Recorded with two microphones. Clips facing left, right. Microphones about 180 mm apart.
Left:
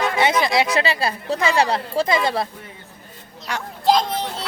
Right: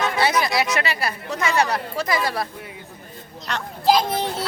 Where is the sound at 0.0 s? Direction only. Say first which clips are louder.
Left 2 dB; 20° left (ahead or behind).